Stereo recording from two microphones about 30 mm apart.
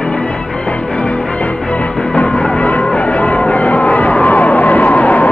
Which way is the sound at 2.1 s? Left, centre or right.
Left.